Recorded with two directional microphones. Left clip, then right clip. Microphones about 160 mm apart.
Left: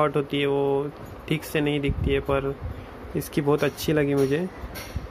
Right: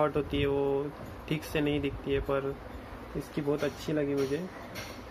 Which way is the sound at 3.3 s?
55° left (ahead or behind).